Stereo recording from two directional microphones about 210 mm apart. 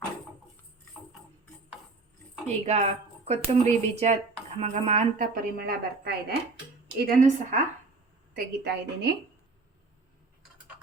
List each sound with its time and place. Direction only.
2.5 s speech: 30° right (ahead or behind)
8.3 s a woman's voice: 50° right (ahead or behind)